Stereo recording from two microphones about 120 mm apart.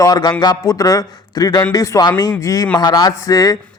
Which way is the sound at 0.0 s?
30° left (ahead or behind).